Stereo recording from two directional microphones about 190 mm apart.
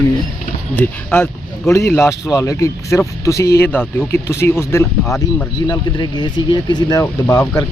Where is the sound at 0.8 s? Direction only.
10° left (ahead or behind).